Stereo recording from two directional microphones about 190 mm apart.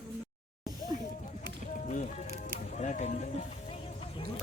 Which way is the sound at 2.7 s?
40° left (ahead or behind).